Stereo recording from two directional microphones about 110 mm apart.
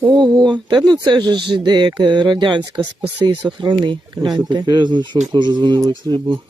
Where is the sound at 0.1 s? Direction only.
40° right (ahead or behind).